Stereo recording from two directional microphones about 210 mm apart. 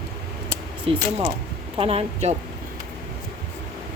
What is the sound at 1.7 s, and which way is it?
Speech, 30° right (ahead or behind).